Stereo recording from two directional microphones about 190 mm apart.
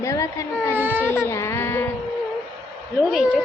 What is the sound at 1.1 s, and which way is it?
Speech, 15° left (ahead or behind).